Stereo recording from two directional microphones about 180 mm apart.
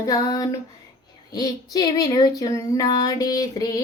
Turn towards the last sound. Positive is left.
turn(degrees=20)  # may be behind; listen again after turning